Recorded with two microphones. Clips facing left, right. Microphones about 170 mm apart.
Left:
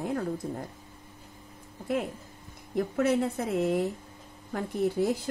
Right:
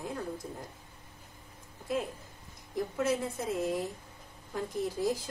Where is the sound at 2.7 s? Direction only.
65° left (ahead or behind).